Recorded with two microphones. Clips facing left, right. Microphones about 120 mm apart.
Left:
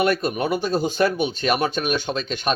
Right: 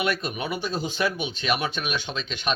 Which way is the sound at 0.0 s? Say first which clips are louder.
Left 6 dB; 40° left (ahead or behind).